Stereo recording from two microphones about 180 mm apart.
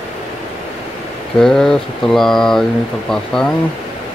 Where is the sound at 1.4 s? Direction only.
5° left (ahead or behind).